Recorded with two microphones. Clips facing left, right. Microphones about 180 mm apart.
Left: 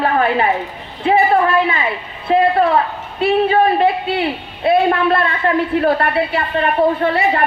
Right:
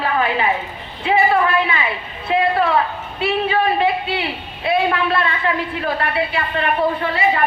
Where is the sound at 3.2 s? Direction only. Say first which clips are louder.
Left 5 dB; 45° left (ahead or behind).